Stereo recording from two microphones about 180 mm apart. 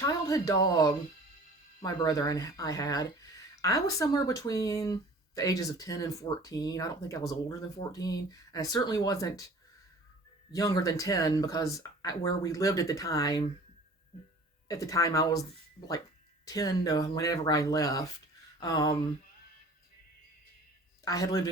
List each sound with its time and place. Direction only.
0.0 s speech: 20° left (ahead or behind)
10.5 s speech: 20° left (ahead or behind)
14.7 s speech: 20° left (ahead or behind)
16.5 s speech: 20° left (ahead or behind)
21.0 s speech: 20° left (ahead or behind)